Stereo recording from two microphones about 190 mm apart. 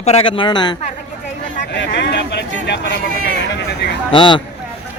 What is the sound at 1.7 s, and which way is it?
Speech, 65° left (ahead or behind).